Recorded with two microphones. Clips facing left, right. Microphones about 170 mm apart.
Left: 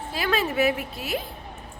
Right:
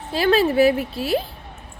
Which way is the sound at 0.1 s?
30° right (ahead or behind).